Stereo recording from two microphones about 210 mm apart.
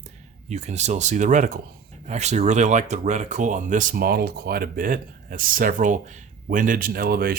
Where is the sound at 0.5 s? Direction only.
35° right (ahead or behind).